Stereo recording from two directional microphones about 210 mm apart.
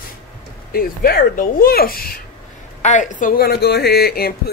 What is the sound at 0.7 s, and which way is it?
Speech, 45° left (ahead or behind).